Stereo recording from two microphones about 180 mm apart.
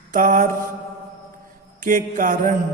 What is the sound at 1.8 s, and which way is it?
Speech, 50° right (ahead or behind).